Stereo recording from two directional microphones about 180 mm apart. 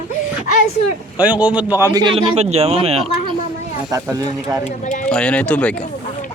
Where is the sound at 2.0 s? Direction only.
30° right (ahead or behind).